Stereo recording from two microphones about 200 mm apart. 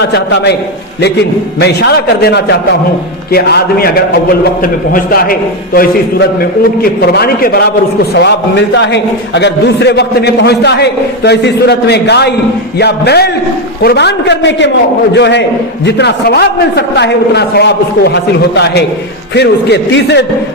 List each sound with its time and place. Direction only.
0.0 s a man's voice: 55° left (ahead or behind)
1.6 s a man's voice: 55° left (ahead or behind)